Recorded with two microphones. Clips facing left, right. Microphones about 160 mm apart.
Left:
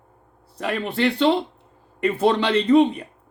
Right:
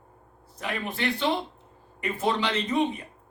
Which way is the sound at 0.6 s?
70° left (ahead or behind).